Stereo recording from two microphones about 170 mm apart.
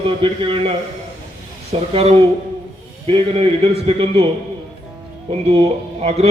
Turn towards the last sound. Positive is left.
turn(degrees=-35)  # may be behind; listen again after turning